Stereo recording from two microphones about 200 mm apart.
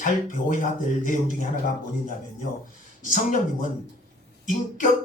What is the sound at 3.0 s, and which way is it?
Speech, 40° left (ahead or behind).